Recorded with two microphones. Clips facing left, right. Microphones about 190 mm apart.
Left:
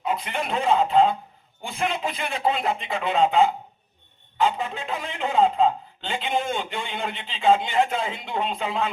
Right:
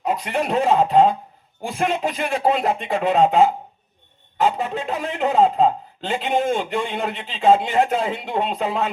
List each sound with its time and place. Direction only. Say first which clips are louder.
0.0 s a man's voice: right 5 dB; 40° right (ahead or behind)